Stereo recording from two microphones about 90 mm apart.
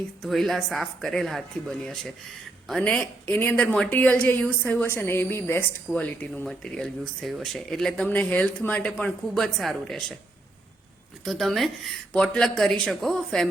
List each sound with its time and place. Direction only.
0.2 s a woman's voice: centre (ahead or behind); by 6.5 s 15° left (ahead or behind)
6.5 s speech: 5° left (ahead or behind)
11.3 s speech: centre (ahead or behind)